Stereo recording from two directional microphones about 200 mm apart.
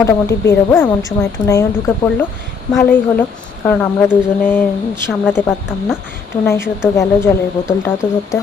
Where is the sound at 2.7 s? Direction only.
10° left (ahead or behind).